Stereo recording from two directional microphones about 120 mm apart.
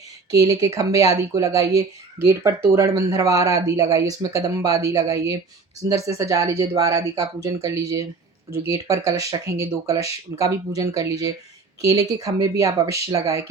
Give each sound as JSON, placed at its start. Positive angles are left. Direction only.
{"t": 0.3, "sound": "speech", "side_deg": -30}